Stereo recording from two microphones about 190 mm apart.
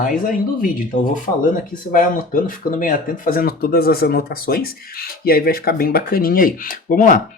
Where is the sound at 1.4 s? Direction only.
45° left (ahead or behind).